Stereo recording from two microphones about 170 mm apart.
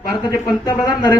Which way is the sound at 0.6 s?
25° left (ahead or behind).